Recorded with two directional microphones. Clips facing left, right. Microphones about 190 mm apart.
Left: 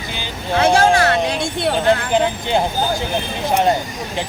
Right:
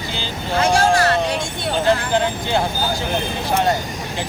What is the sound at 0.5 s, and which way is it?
Speech, 60° left (ahead or behind).